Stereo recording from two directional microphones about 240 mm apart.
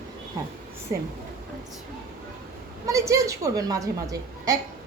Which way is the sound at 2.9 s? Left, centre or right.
Centre.